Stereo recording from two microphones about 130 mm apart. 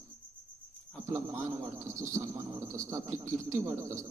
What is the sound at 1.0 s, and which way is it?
A man's voice, 25° right (ahead or behind).